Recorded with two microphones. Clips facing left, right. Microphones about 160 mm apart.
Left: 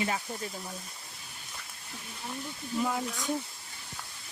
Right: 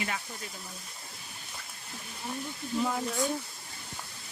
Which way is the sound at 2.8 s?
5° left (ahead or behind).